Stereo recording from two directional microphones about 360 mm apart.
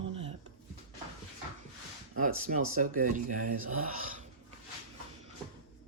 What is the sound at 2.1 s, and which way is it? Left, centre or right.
Speech, right.